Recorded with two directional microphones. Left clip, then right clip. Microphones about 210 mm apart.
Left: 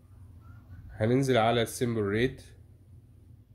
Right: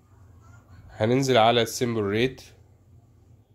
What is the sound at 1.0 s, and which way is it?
Speech, 20° right (ahead or behind).